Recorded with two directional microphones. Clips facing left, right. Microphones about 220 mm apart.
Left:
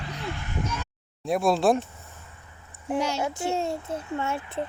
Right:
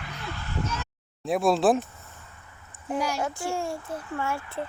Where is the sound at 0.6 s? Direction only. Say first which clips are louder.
Even; 10° left (ahead or behind).